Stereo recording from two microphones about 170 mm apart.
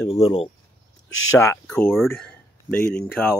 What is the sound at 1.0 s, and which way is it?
Speech, 15° left (ahead or behind).